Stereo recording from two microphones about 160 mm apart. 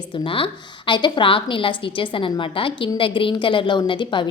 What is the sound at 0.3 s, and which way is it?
A woman's voice, 35° left (ahead or behind).